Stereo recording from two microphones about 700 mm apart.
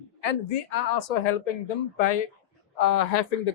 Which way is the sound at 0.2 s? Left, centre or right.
Left.